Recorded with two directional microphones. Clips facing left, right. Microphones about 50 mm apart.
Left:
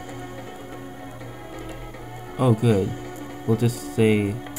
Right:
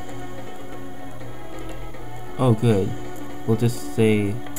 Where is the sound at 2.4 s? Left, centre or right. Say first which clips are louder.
Even; centre.